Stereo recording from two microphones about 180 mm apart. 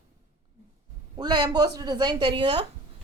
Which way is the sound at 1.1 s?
25° right (ahead or behind).